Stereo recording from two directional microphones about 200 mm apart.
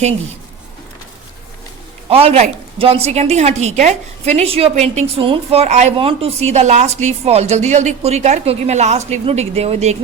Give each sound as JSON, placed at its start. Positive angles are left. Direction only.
{"t": 2.2, "sound": "a woman's voice", "side_deg": -30}